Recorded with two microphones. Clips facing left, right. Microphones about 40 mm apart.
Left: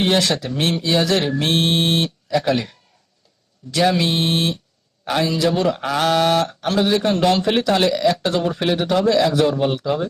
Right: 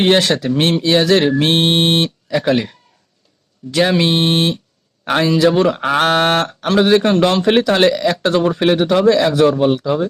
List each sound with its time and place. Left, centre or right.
0.0 s speech: right
2.4 s a man's voice: right